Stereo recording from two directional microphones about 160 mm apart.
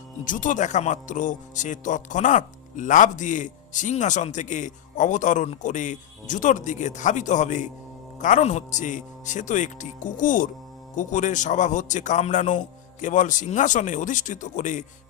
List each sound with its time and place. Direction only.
0.3 s speech: 55° left (ahead or behind)